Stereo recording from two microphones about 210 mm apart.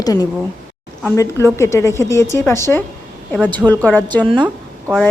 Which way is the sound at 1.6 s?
15° left (ahead or behind).